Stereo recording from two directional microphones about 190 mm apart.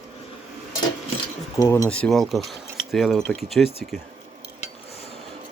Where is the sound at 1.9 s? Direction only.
5° left (ahead or behind).